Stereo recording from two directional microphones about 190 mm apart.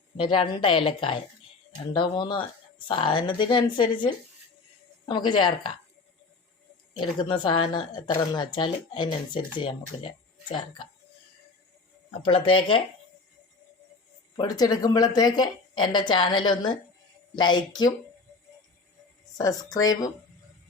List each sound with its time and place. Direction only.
0.2 s speech: 25° left (ahead or behind)
7.2 s speech: 25° left (ahead or behind)
12.2 s speech: 25° left (ahead or behind)
14.3 s speech: 20° left (ahead or behind)
19.4 s speech: 20° left (ahead or behind)